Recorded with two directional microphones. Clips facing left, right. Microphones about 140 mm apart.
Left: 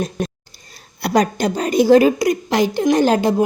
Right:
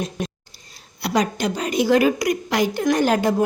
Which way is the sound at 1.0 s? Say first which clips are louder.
Left 4 dB; 45° left (ahead or behind).